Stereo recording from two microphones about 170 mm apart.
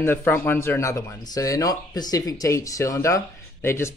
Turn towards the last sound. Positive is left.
turn(degrees=15)  # may be behind; listen again after turning